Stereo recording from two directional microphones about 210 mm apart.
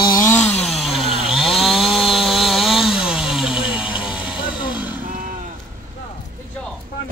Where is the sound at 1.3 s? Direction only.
Centre (ahead or behind).